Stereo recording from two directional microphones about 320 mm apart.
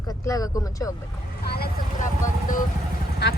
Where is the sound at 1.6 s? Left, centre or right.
Left.